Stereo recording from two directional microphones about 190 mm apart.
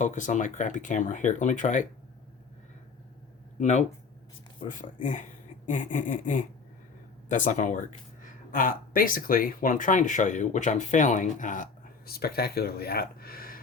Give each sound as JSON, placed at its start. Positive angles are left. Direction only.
{"t": 0.0, "sound": "speech", "side_deg": 40}
{"t": 3.6, "sound": "speech", "side_deg": 40}